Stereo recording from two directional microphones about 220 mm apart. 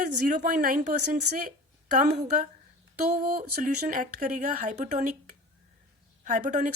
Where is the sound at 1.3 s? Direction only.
90° right.